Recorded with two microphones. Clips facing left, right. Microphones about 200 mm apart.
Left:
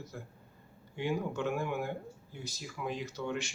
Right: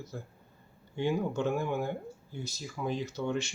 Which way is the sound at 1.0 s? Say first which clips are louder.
Right 4 dB; 30° right (ahead or behind).